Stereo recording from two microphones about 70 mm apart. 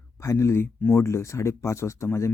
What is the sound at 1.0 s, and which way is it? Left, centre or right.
Speech, left.